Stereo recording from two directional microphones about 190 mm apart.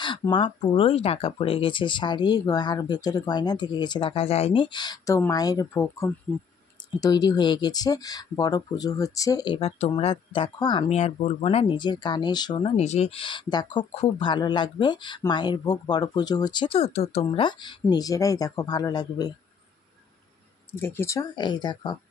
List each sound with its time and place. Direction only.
0.3 s speech: 25° left (ahead or behind)
11.0 s speech: 35° left (ahead or behind)
20.7 s speech: 10° left (ahead or behind)